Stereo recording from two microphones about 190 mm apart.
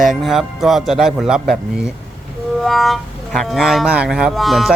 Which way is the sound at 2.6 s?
Centre (ahead or behind).